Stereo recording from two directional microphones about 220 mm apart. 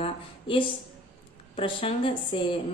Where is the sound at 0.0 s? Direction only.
25° left (ahead or behind).